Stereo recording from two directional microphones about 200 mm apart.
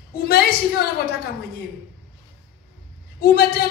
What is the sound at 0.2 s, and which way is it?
A woman's voice, 50° left (ahead or behind).